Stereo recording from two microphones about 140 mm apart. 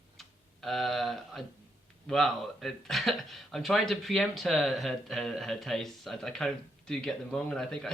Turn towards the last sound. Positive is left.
turn(degrees=5)  # may be behind; listen again after turning